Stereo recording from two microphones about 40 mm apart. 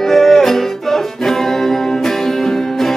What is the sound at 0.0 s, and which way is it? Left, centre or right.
Music, centre.